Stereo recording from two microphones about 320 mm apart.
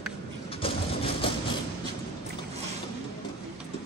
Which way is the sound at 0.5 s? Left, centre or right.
Centre.